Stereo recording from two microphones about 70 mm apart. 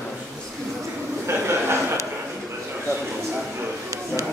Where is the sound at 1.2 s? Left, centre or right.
Right.